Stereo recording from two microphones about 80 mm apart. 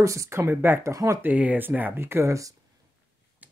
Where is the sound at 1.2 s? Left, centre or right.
Centre; by 2.5 s right.